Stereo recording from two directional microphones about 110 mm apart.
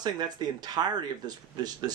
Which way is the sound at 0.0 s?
40° right (ahead or behind).